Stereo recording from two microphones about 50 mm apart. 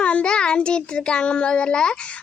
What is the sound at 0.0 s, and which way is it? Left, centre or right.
A child's voice, left.